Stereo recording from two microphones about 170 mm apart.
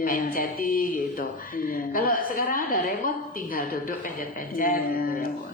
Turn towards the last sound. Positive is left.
turn(degrees=55)  # may be behind; listen again after turning